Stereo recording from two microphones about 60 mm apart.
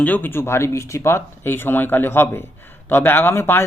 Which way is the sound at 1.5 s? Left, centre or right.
Left.